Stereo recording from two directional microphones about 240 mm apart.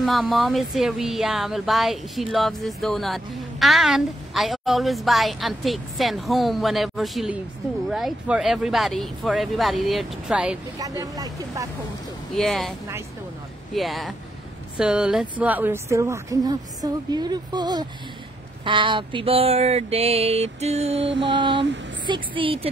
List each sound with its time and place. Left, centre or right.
0.0 s speech: centre
10.8 s speech: centre
12.4 s speech: centre
13.7 s speech: centre
18.6 s a sound: right
21.0 s mantra: right
21.3 s a sound: centre